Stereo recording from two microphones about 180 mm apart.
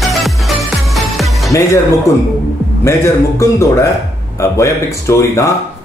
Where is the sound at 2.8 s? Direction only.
15° left (ahead or behind).